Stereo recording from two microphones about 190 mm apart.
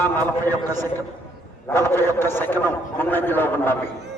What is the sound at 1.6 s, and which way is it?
A man's voice, 10° left (ahead or behind).